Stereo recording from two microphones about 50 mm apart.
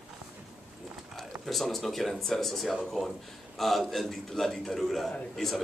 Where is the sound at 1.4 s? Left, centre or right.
Centre.